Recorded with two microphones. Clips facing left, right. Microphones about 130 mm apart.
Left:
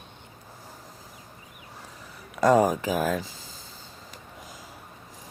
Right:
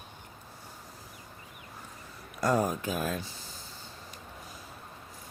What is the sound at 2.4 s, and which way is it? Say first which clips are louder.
Speech: left 8 dB; 90° left.